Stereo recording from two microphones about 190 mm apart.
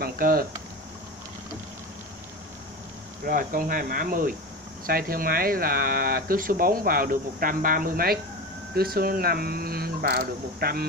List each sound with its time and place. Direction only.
0.0 s speech: 50° right (ahead or behind)
3.3 s speech: 50° right (ahead or behind)